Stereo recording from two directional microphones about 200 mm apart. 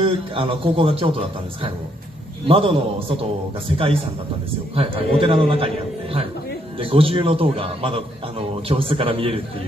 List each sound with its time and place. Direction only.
0.0 s a man's voice: 25° right (ahead or behind)
6.8 s a man's voice: 25° right (ahead or behind)